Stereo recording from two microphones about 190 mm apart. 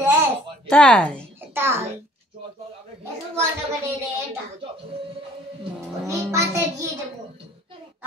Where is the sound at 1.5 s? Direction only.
10° right (ahead or behind).